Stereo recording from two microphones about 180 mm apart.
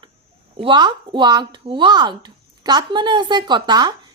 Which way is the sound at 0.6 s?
25° right (ahead or behind).